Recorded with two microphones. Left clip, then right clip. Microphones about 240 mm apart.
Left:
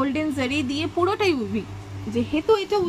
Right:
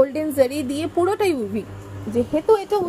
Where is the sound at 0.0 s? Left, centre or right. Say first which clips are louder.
Right 7 dB; centre.